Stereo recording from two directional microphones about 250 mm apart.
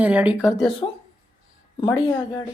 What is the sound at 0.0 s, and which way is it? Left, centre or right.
Speech, centre.